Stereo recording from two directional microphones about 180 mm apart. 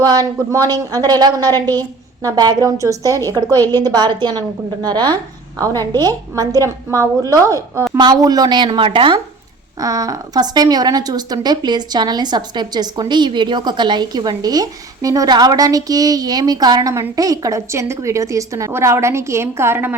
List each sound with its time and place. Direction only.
0.0 s a woman's voice: 20° right (ahead or behind)
1.5 s a woman's voice: 10° left (ahead or behind)
2.2 s a woman's voice: 20° right (ahead or behind)